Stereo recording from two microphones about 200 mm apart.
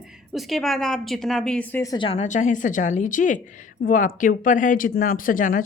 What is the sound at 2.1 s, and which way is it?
A woman's voice, 35° left (ahead or behind).